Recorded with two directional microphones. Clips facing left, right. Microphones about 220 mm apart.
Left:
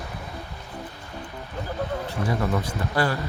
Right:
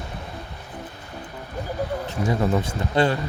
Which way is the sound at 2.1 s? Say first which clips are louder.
Right 4 dB; 25° right (ahead or behind).